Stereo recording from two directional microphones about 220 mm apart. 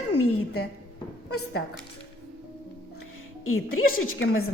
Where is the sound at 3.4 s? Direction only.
70° left (ahead or behind).